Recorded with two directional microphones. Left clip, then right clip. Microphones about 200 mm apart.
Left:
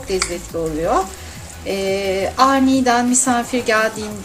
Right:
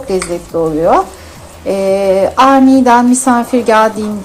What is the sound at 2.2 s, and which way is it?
A woman's voice, 10° left (ahead or behind).